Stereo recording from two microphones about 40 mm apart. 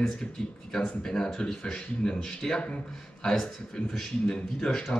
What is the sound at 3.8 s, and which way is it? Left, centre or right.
Speech, left.